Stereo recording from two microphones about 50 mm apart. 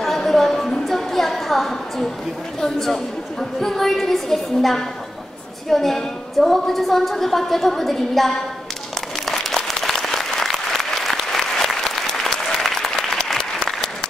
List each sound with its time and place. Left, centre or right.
0.0 s a sound: centre
2.6 s a woman's voice: centre
9.2 s applause: centre
13.2 s applause: centre